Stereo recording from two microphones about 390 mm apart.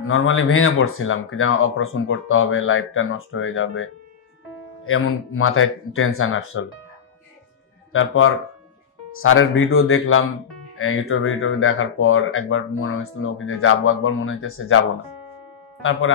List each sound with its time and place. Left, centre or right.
0.0 s speech: left
7.9 s speech: left
15.8 s speech: left